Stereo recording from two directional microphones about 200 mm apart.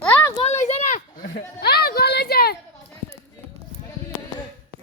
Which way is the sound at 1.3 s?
50° left (ahead or behind).